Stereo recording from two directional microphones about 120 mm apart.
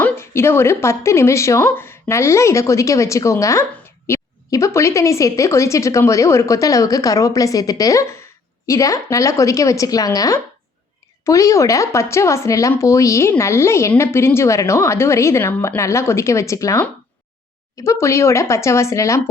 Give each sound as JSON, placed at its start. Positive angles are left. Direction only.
{"t": 0.0, "sound": "a woman's voice", "side_deg": 20}